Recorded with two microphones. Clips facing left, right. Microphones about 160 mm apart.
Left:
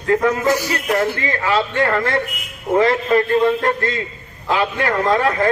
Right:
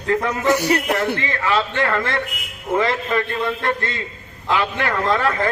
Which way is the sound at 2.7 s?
35° left (ahead or behind).